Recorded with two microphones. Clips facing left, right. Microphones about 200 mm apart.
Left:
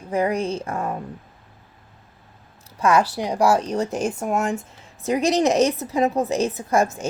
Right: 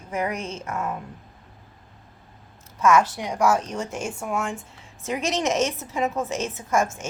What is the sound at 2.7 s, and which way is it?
A woman's voice, 35° left (ahead or behind).